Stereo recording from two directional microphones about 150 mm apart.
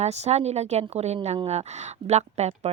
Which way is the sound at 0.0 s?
45° right (ahead or behind).